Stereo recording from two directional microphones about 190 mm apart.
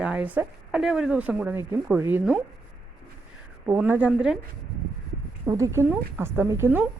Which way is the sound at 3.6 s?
10° right (ahead or behind).